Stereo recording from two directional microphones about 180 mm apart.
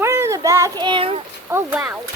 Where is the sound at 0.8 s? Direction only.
30° right (ahead or behind).